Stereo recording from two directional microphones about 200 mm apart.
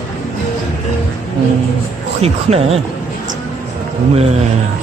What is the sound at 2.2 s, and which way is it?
Speech, 30° right (ahead or behind).